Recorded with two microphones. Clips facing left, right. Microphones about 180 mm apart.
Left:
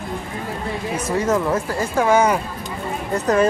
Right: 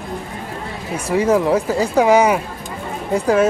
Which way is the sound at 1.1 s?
10° right (ahead or behind).